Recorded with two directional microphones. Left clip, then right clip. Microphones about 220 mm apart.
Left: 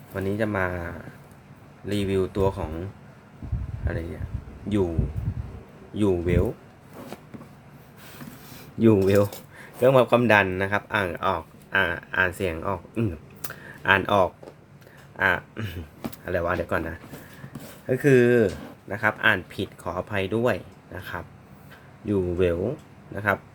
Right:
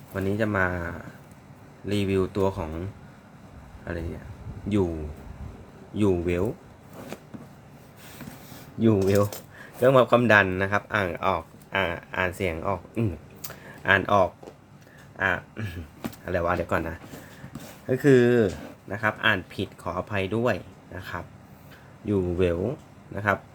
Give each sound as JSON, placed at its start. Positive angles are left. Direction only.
{"t": 0.1, "sound": "speech", "side_deg": 0}
{"t": 3.9, "sound": "speech", "side_deg": 0}
{"t": 5.9, "sound": "speech", "side_deg": 0}
{"t": 8.8, "sound": "speech", "side_deg": 20}
{"t": 9.8, "sound": "speech", "side_deg": 5}
{"t": 16.2, "sound": "speech", "side_deg": 0}